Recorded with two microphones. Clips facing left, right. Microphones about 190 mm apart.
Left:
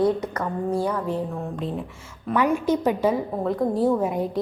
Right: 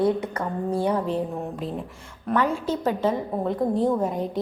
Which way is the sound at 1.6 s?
Centre (ahead or behind).